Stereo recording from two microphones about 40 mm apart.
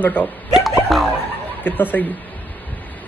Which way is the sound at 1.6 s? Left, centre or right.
Left.